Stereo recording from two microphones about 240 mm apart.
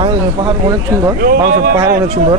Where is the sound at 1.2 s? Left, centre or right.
Right.